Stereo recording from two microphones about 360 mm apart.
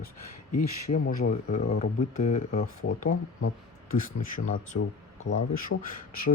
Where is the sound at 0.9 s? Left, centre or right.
Left.